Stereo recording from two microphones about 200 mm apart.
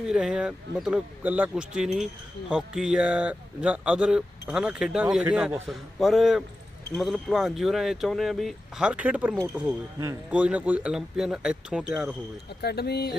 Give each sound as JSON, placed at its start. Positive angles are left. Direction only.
{"t": 0.0, "sound": "speech", "side_deg": -5}
{"t": 12.6, "sound": "speech", "side_deg": 55}